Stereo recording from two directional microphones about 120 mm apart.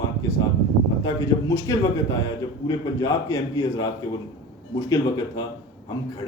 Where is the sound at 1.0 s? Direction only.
30° left (ahead or behind).